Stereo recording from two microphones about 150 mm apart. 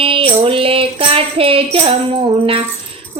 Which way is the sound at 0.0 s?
35° right (ahead or behind).